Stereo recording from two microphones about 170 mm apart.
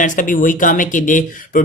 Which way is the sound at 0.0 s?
50° left (ahead or behind).